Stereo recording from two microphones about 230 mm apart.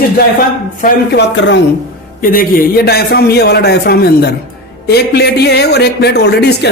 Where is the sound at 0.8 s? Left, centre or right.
Left.